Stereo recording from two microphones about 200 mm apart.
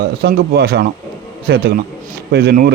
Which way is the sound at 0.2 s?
55° right (ahead or behind).